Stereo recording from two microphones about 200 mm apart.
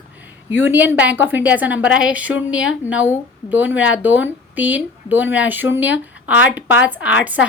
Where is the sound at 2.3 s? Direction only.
70° left (ahead or behind).